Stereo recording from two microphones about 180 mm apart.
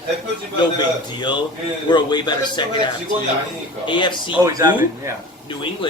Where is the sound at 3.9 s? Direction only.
25° left (ahead or behind).